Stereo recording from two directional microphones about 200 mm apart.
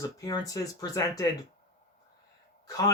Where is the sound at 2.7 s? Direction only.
20° left (ahead or behind).